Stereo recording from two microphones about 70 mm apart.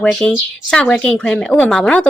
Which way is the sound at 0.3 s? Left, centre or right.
Centre.